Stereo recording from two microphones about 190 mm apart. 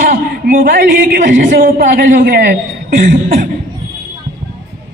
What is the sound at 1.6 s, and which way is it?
A man's voice, 50° right (ahead or behind).